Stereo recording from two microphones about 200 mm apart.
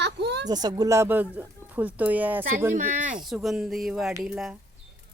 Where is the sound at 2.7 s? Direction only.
40° right (ahead or behind).